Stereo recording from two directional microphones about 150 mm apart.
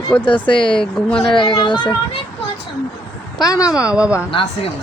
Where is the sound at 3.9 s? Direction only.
5° right (ahead or behind).